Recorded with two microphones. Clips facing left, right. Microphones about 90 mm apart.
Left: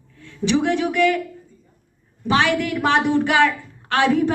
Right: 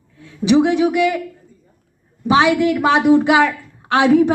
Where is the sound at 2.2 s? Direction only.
15° right (ahead or behind).